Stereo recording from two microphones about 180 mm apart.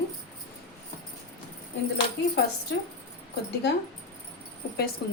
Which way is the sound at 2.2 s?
70° left (ahead or behind).